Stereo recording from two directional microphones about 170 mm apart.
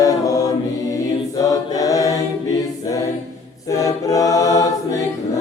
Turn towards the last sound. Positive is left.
turn(degrees=20)  # may be behind; listen again after turning